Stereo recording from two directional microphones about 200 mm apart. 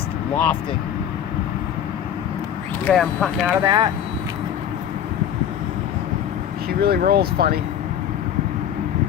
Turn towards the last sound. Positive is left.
turn(degrees=-50)  # may be behind; listen again after turning